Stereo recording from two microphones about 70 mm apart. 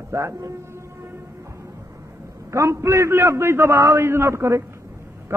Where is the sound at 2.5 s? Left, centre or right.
Right.